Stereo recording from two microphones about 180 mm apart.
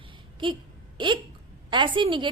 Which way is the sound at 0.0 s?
25° right (ahead or behind).